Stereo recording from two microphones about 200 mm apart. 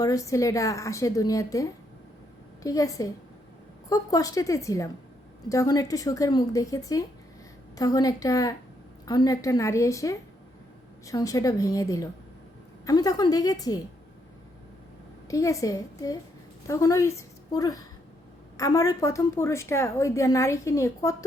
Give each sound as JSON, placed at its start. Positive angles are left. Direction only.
{"t": 0.0, "sound": "a woman's voice", "side_deg": 15}
{"t": 15.3, "sound": "a woman's voice", "side_deg": 15}